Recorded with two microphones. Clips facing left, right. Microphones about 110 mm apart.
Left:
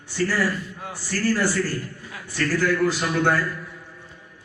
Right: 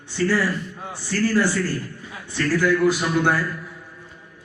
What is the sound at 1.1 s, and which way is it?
A man's voice, 20° right (ahead or behind).